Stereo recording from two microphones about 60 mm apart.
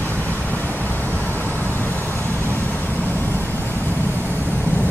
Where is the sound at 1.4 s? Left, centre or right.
Left.